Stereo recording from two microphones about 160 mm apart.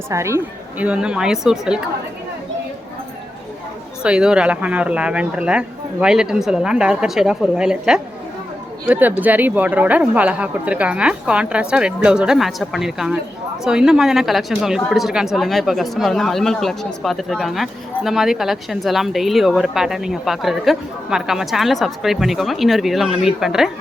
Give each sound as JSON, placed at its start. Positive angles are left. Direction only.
{"t": 0.1, "sound": "speech", "side_deg": -15}
{"t": 0.9, "sound": "speech", "side_deg": -5}
{"t": 4.0, "sound": "speech", "side_deg": -5}